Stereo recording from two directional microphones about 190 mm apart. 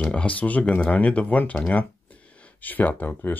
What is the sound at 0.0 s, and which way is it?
Speech, 5° left (ahead or behind).